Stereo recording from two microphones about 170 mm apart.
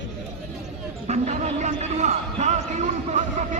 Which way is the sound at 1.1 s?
45° right (ahead or behind).